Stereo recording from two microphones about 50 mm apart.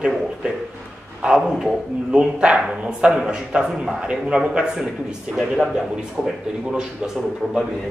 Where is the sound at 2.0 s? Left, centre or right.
Right.